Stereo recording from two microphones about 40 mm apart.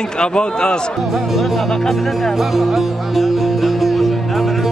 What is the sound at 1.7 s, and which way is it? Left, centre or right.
Music, centre.